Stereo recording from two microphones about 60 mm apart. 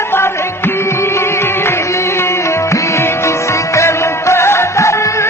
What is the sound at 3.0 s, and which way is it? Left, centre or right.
Music, left.